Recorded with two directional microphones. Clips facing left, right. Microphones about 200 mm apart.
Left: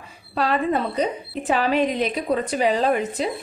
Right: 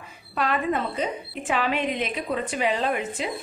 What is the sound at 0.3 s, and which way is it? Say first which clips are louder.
A woman's voice: left 3 dB; 35° left (ahead or behind).